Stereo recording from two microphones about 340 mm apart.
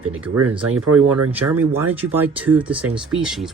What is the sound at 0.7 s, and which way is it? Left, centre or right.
Speech, right.